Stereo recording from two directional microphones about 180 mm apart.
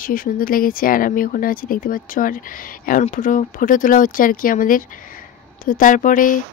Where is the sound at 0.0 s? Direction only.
50° left (ahead or behind).